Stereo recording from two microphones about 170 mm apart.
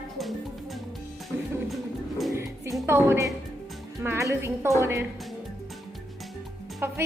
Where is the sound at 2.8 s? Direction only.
15° right (ahead or behind).